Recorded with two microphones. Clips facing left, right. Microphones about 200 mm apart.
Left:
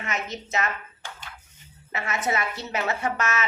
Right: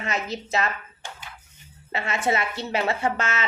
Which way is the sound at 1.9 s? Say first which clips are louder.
Right 2 dB; 30° right (ahead or behind).